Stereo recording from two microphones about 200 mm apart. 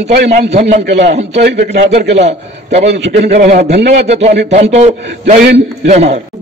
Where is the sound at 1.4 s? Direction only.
60° right (ahead or behind).